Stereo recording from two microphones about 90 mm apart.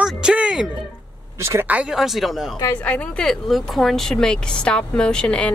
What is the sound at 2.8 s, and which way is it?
Speech, 15° left (ahead or behind).